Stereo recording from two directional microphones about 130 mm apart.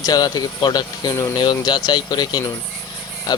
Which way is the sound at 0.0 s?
30° left (ahead or behind).